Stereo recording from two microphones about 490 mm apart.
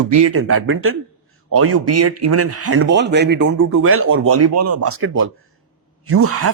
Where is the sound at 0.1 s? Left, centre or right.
Right.